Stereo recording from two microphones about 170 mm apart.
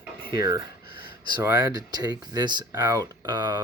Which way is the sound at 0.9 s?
70° left (ahead or behind).